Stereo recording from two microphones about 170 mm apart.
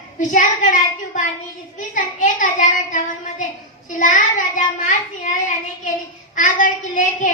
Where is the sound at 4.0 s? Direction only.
50° left (ahead or behind).